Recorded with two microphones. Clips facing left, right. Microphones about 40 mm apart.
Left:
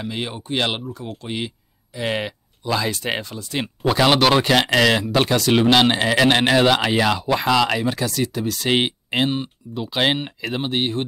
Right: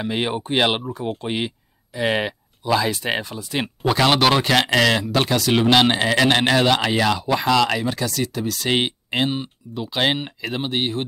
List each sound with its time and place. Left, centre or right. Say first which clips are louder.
0.0 s speech: right 5 dB; right; by 11.1 s centre